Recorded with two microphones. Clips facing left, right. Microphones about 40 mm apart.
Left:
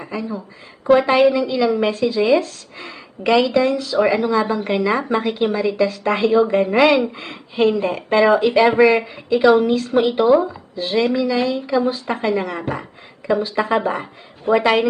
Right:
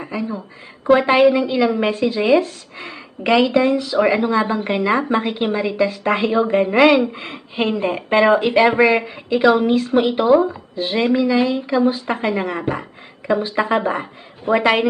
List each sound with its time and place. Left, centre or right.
0.0 s speech: centre
2.7 s speech: centre
4.3 s a woman's voice: right
9.6 s a woman's voice: right
9.9 s speech: centre
10.5 s a woman's voice: centre
12.0 s speech: centre